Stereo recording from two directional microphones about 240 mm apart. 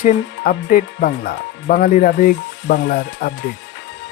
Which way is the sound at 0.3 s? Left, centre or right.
Left.